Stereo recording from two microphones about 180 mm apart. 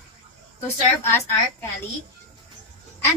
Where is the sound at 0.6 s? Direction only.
15° left (ahead or behind).